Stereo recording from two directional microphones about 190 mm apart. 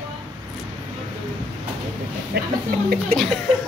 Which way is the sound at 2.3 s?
55° right (ahead or behind).